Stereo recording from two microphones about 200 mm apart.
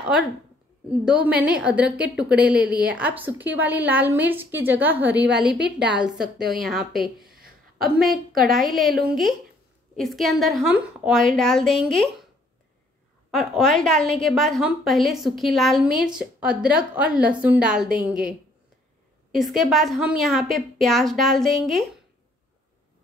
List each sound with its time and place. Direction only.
0.0 s a woman's voice: 5° right (ahead or behind)
7.2 s a sound: 50° right (ahead or behind)
8.0 s a woman's voice: centre (ahead or behind)
13.3 s a woman's voice: centre (ahead or behind)
19.3 s a woman's voice: centre (ahead or behind)